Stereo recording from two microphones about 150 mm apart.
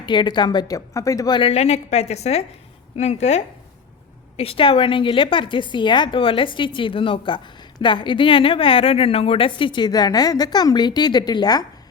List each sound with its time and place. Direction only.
0.0 s speech: 30° left (ahead or behind)
1.4 s a woman's voice: 40° left (ahead or behind); by 11.6 s 25° left (ahead or behind)